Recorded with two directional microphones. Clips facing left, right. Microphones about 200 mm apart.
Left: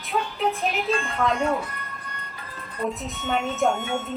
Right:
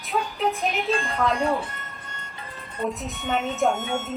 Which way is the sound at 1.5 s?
25° right (ahead or behind).